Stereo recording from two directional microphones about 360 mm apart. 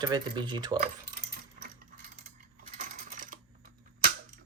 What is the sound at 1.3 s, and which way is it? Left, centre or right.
Typing, right.